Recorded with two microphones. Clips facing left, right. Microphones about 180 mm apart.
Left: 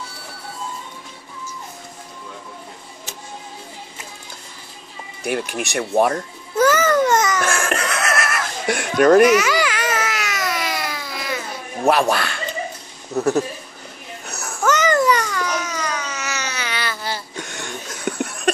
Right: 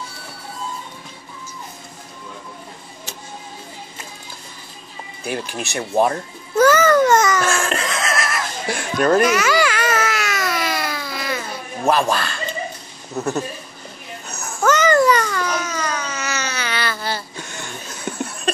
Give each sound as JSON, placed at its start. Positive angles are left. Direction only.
{"t": 5.2, "sound": "speech", "side_deg": 65}
{"t": 6.6, "sound": "babbling", "side_deg": 20}
{"t": 7.7, "sound": "a sound", "side_deg": 65}
{"t": 9.3, "sound": "baby cry", "side_deg": 20}
{"t": 11.8, "sound": "speech", "side_deg": 60}
{"t": 14.7, "sound": "babbling", "side_deg": 20}
{"t": 17.4, "sound": "a sound", "side_deg": 65}